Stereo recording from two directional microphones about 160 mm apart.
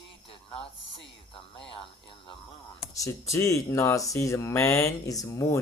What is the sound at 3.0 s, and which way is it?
Speech, 20° left (ahead or behind).